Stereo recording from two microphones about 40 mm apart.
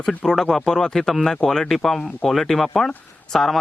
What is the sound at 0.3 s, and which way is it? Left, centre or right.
Speech, centre.